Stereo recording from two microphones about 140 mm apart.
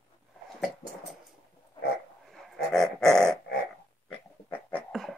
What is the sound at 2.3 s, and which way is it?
Dog, 5° left (ahead or behind).